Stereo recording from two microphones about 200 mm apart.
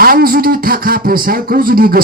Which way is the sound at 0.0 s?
45° right (ahead or behind).